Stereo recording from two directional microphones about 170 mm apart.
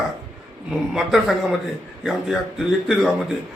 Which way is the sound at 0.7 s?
Centre (ahead or behind).